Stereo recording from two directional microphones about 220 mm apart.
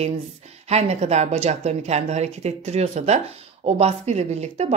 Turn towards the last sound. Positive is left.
turn(degrees=-30)  # may be behind; listen again after turning